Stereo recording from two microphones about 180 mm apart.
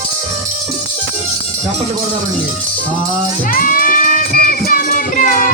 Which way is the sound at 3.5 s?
50° left (ahead or behind).